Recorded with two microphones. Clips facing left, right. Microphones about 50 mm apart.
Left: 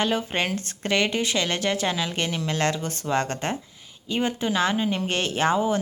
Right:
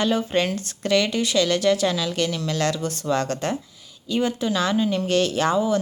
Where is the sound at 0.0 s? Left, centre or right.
Left.